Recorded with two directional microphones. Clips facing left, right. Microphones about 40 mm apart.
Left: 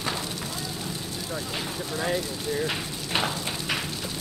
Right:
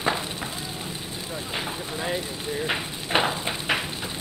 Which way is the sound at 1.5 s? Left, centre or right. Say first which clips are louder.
Right 1 dB; right.